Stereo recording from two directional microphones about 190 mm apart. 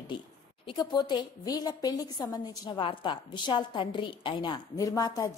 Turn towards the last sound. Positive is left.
turn(degrees=20)  # may be behind; listen again after turning